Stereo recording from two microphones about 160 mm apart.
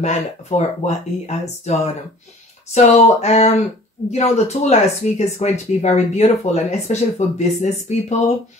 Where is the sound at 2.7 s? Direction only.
45° left (ahead or behind).